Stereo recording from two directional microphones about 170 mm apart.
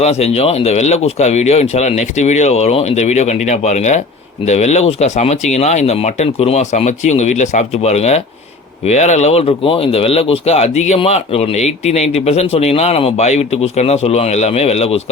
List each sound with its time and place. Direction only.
0.0 s speech: 40° left (ahead or behind)